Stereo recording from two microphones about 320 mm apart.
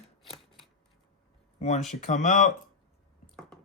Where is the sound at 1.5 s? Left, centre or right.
Left.